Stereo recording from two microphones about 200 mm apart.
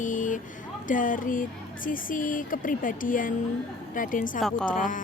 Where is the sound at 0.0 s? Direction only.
40° left (ahead or behind).